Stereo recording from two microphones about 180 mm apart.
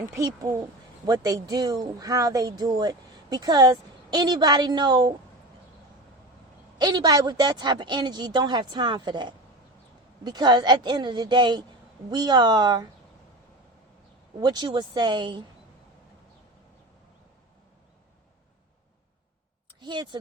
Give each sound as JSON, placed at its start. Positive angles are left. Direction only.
{"t": 0.0, "sound": "speech", "side_deg": -20}
{"t": 6.7, "sound": "speech", "side_deg": -25}
{"t": 14.3, "sound": "speech", "side_deg": -25}
{"t": 19.8, "sound": "speech", "side_deg": -25}